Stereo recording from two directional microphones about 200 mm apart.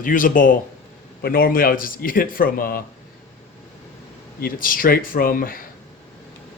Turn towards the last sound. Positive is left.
turn(degrees=45)  # may be behind; listen again after turning